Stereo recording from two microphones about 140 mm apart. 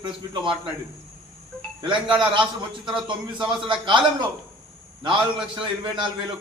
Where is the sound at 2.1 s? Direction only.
35° right (ahead or behind).